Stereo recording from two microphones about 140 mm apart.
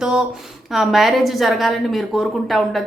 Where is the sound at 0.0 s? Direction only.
5° right (ahead or behind).